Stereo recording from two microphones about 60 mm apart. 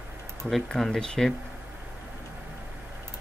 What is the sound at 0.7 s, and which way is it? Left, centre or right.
Speech, centre.